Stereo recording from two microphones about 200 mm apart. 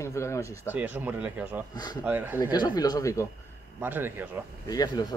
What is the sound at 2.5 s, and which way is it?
Speech, 20° left (ahead or behind).